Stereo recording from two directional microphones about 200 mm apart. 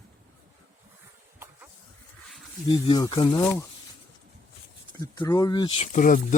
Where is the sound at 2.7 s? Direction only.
20° left (ahead or behind).